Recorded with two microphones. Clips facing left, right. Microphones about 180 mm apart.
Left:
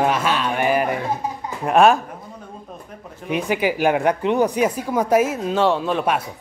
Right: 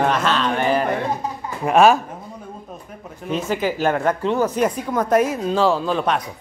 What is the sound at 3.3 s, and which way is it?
Speech, 15° left (ahead or behind).